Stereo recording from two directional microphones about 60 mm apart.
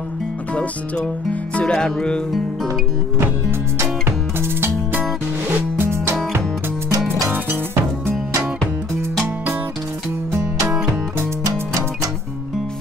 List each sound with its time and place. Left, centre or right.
1.5 s music: centre
3.7 s music: right
7.2 s music: right